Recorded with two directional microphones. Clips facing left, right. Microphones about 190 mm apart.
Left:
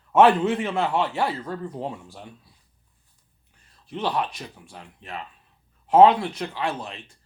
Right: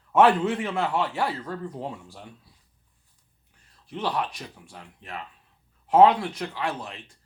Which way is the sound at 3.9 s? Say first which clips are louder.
Left 2 dB; 25° left (ahead or behind).